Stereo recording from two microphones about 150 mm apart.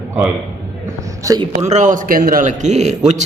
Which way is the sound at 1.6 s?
55° right (ahead or behind).